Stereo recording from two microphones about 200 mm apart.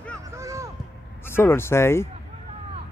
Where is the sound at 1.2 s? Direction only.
10° left (ahead or behind).